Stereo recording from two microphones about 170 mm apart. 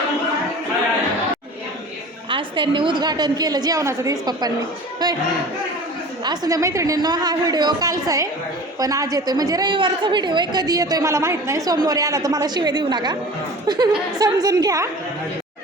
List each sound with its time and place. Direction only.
2.3 s a woman's voice: 30° right (ahead or behind)
5.0 s music: 25° right (ahead or behind)
6.2 s a woman's voice: 25° right (ahead or behind)